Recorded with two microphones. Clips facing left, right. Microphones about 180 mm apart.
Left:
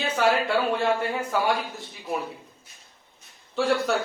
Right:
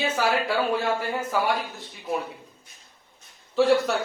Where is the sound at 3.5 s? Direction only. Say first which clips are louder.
Right 4 dB; centre (ahead or behind).